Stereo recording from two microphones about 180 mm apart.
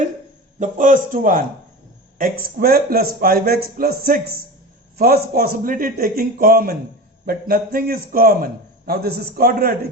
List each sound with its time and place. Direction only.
0.6 s a man's voice: 45° right (ahead or behind)